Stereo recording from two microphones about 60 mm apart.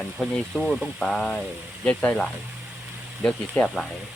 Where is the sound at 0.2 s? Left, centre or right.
Centre.